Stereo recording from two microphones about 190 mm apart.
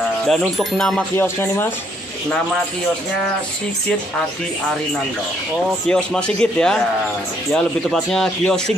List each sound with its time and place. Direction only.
0.3 s speech: centre (ahead or behind)
5.9 s speech: 5° left (ahead or behind)